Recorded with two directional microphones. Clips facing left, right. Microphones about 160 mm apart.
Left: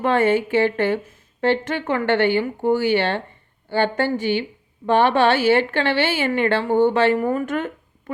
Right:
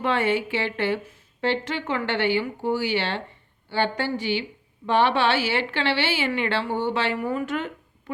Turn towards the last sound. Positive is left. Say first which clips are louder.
# left 5 dB
turn(degrees=50)  # may be behind; listen again after turning